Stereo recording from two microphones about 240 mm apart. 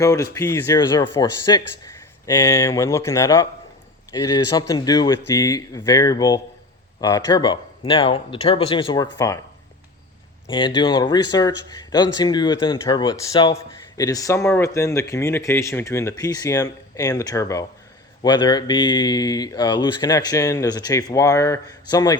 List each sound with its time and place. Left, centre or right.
0.0 s speech: centre
10.5 s speech: centre